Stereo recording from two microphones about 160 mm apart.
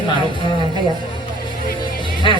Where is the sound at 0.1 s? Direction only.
30° left (ahead or behind).